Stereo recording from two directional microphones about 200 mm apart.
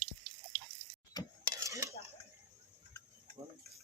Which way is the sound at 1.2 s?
20° left (ahead or behind).